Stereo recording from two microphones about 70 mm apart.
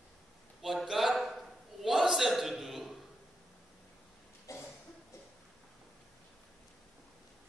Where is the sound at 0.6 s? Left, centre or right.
Centre.